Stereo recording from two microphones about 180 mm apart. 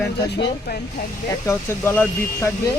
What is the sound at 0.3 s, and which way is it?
Speech, 70° left (ahead or behind).